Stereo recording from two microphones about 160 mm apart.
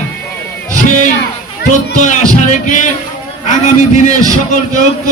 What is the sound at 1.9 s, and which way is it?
Speech, 50° left (ahead or behind).